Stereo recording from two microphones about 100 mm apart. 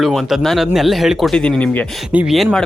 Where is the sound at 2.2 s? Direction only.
Centre (ahead or behind).